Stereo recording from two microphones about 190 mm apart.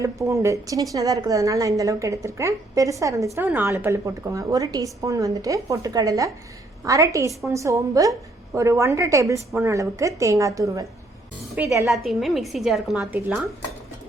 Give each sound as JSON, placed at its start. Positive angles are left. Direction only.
{"t": 0.0, "sound": "a woman's voice", "side_deg": -15}
{"t": 11.9, "sound": "a woman's voice", "side_deg": 0}